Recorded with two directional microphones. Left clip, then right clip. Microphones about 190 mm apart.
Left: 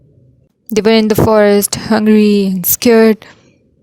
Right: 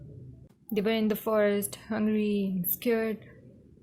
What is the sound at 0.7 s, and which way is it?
A woman's voice, 55° left (ahead or behind).